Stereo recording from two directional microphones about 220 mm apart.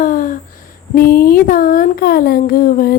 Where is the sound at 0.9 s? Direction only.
40° left (ahead or behind).